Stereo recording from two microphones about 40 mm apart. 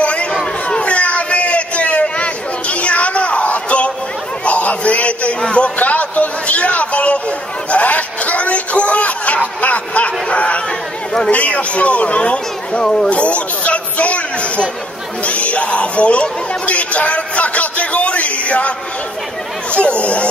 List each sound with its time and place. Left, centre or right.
0.0 s chatter: left
0.7 s a sound: left
11.2 s speech: left; by 13.1 s centre
13.1 s a sound: left
15.2 s chatter: left
19.7 s speech: left